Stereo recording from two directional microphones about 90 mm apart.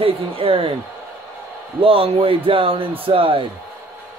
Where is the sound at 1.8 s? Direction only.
90° right.